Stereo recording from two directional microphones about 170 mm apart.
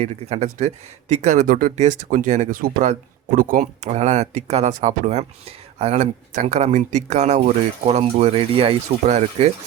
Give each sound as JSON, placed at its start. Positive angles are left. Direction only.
{"t": 0.0, "sound": "speech", "side_deg": -40}